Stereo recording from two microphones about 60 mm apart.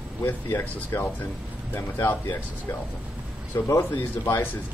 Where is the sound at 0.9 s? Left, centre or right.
Left.